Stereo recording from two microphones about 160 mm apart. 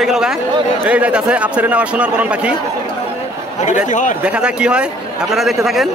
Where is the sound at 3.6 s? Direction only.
50° left (ahead or behind).